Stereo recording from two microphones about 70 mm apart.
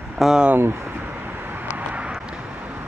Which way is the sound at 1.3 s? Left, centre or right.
Right.